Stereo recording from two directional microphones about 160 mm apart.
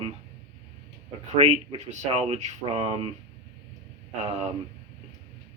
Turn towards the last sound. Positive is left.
turn(degrees=-40)  # may be behind; listen again after turning